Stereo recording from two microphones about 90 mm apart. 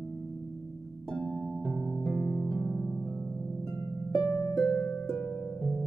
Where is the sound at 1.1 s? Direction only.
10° left (ahead or behind).